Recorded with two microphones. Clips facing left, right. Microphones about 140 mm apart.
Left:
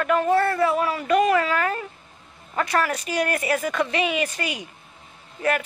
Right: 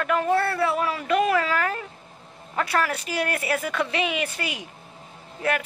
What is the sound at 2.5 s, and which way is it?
Speech, 5° right (ahead or behind).